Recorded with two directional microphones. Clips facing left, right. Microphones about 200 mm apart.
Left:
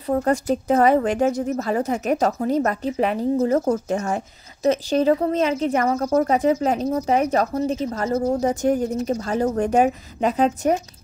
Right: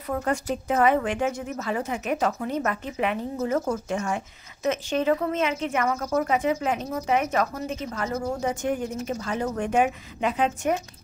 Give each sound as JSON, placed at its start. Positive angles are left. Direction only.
{"t": 0.0, "sound": "a woman's voice", "side_deg": 35}